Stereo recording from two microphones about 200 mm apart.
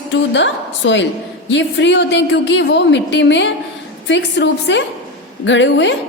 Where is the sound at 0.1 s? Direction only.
65° left (ahead or behind).